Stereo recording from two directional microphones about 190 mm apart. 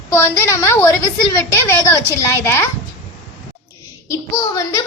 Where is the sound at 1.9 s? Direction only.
15° left (ahead or behind).